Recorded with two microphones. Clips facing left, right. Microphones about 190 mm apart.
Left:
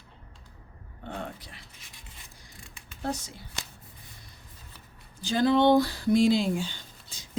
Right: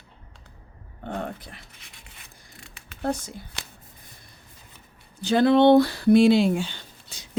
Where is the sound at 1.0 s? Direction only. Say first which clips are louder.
Right 6 dB; 55° right (ahead or behind).